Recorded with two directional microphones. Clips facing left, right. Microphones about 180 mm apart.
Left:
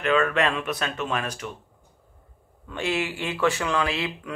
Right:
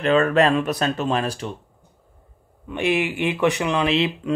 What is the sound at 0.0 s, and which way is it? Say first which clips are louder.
Speech: right 5 dB; 35° right (ahead or behind).